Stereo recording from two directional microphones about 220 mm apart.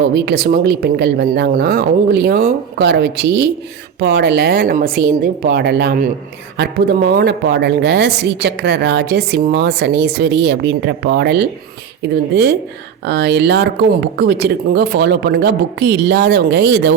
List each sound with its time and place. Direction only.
0.0 s a woman's voice: 50° right (ahead or behind)